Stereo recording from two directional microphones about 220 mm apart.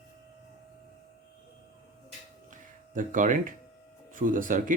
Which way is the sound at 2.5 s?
35° right (ahead or behind).